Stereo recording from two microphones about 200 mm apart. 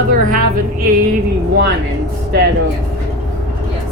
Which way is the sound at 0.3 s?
45° right (ahead or behind).